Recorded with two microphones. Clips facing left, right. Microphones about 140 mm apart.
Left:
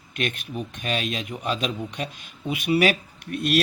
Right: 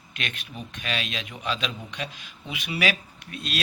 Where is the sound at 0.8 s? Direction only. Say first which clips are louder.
Left 3 dB; 45° left (ahead or behind).